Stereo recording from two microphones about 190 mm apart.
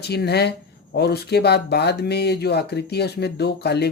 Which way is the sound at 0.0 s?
60° left (ahead or behind).